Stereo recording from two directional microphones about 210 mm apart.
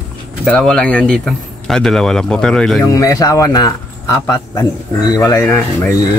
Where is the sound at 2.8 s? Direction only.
15° left (ahead or behind).